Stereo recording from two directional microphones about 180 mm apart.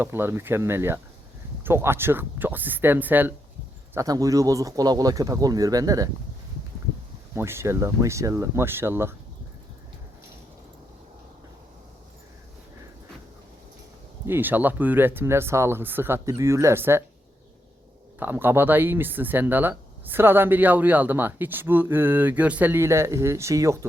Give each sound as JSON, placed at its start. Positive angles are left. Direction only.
{"t": 0.0, "sound": "speech", "side_deg": -10}
{"t": 7.3, "sound": "speech", "side_deg": -15}
{"t": 14.3, "sound": "speech", "side_deg": -10}
{"t": 18.2, "sound": "speech", "side_deg": -10}